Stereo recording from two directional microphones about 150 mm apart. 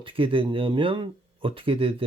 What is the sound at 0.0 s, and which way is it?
Speech, 35° right (ahead or behind).